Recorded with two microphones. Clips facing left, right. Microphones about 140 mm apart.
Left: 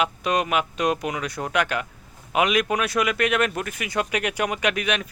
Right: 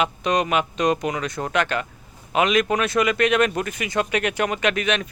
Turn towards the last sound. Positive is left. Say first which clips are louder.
# right 2 dB
turn(degrees=10)  # may be behind; listen again after turning